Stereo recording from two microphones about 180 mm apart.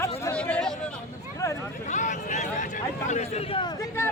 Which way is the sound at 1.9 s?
40° left (ahead or behind).